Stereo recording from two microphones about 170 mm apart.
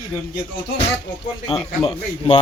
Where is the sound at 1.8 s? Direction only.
35° left (ahead or behind).